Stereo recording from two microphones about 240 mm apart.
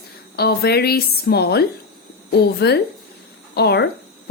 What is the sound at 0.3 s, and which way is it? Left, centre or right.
A woman's voice, left.